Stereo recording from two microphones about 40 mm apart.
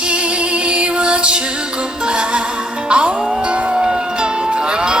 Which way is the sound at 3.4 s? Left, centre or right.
Right.